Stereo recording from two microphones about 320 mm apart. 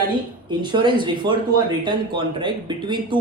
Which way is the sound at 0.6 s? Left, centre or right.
Centre.